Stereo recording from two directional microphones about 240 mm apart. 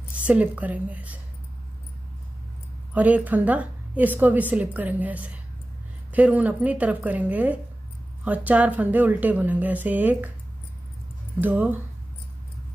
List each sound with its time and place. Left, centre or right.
0.1 s a woman's voice: centre
2.9 s a woman's voice: centre
11.4 s a woman's voice: centre